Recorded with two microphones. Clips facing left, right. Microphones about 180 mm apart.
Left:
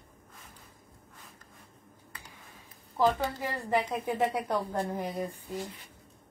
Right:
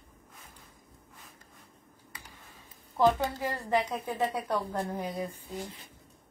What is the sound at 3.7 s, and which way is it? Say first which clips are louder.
A woman's voice: left 1 dB; 15° left (ahead or behind).